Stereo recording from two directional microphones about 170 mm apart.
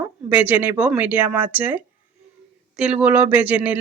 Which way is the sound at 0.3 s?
10° right (ahead or behind).